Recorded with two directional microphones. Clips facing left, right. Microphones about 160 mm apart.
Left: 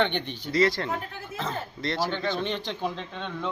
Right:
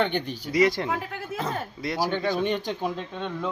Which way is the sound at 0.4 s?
15° right (ahead or behind).